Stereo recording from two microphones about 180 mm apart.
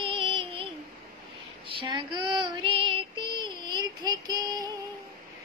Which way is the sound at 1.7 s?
25° right (ahead or behind).